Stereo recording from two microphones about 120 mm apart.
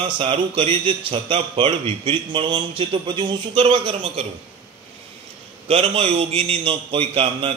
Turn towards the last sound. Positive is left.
turn(degrees=-50)  # may be behind; listen again after turning